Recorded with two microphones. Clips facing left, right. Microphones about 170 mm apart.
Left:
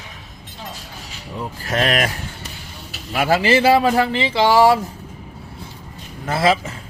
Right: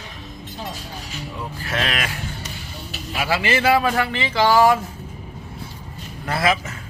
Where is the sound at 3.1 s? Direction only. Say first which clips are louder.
Left 6 dB; 50° left (ahead or behind).